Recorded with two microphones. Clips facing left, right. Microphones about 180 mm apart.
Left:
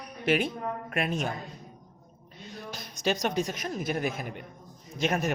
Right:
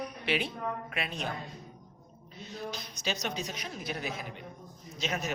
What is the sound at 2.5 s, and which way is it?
A man's voice, 50° left (ahead or behind).